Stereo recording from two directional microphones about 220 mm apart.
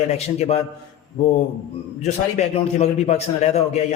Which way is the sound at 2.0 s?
30° left (ahead or behind).